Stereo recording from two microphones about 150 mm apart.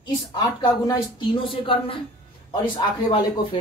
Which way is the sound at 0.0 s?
30° left (ahead or behind).